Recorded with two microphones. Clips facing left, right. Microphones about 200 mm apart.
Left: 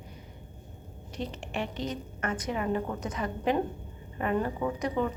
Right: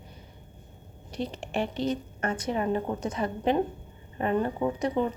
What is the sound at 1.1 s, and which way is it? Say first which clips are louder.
A woman's voice: right 4 dB; 35° right (ahead or behind).